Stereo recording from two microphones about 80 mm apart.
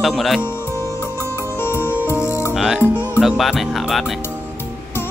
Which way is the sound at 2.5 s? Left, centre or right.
Centre.